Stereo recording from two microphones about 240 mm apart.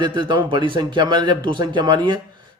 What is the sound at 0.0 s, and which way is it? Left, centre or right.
Speech, centre.